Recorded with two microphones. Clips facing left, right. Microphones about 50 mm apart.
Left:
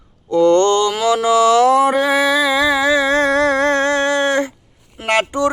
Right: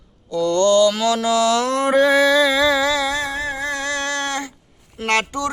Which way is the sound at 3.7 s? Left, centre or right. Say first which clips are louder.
Left 8 dB; left.